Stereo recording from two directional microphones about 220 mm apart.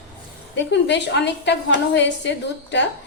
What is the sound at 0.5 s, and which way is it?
A woman's voice, 55° left (ahead or behind).